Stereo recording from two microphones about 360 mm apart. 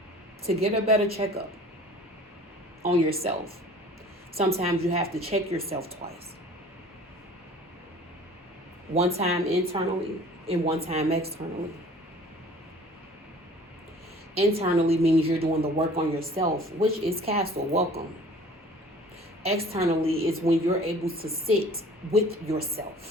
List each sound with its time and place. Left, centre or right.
0.4 s a woman's voice: centre
2.8 s a woman's voice: centre
9.1 s a woman's voice: centre
14.3 s a woman's voice: centre
19.4 s a woman's voice: centre